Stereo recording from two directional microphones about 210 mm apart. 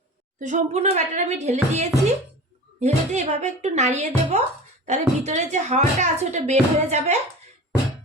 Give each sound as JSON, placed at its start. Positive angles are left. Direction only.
{"t": 0.3, "sound": "speech", "side_deg": -35}